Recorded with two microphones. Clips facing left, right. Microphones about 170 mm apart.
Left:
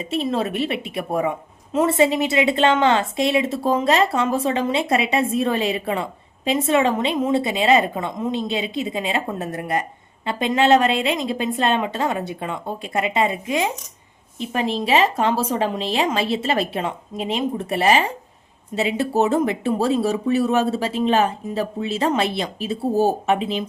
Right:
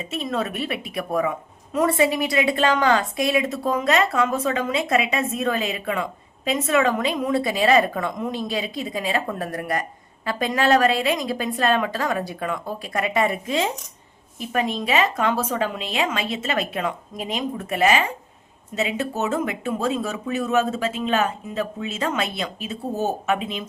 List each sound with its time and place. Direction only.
0.0 s a woman's voice: 30° left (ahead or behind)
14.3 s speech: 30° left (ahead or behind)